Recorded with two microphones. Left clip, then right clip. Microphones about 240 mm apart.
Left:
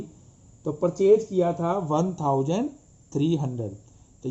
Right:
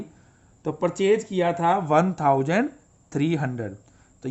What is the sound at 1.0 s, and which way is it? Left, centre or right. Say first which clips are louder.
Speech: left 2 dB; right.